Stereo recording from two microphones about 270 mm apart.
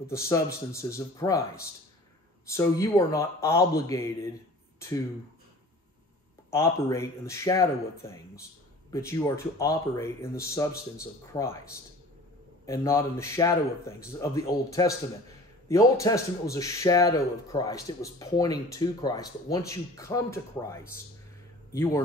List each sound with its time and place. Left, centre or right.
0.0 s speech: centre
6.5 s speech: centre
12.6 s speech: centre